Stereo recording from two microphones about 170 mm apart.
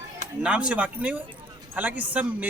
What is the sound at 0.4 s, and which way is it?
A man's voice, 5° right (ahead or behind).